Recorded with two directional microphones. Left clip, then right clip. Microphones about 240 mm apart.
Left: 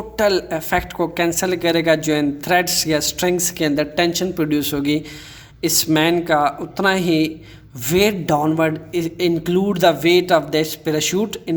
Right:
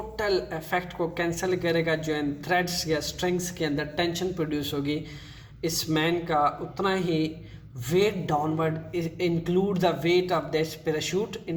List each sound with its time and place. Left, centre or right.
0.2 s speech: left